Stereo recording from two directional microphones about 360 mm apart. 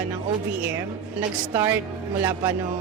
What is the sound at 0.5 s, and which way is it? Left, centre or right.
A woman's voice, centre.